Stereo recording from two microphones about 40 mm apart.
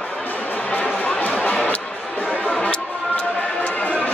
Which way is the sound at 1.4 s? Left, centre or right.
Left.